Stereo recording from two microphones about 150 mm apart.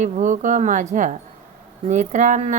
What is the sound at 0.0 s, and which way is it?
A woman's voice, 55° right (ahead or behind).